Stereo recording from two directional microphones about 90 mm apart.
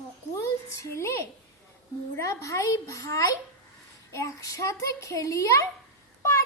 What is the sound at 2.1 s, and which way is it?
A child's voice, 35° left (ahead or behind).